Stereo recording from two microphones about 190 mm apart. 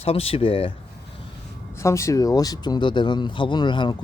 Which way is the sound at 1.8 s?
15° left (ahead or behind).